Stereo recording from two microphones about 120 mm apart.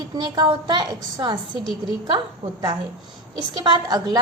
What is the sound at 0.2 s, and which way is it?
A woman's voice, 35° right (ahead or behind).